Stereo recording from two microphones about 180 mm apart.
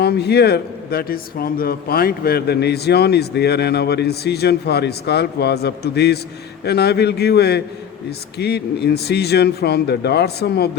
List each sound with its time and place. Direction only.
0.0 s speech: 65° left (ahead or behind)